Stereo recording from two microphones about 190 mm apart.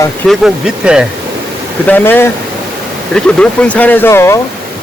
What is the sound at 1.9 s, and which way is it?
Speech, 10° left (ahead or behind).